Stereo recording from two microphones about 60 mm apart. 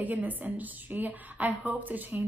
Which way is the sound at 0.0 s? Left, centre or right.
Right.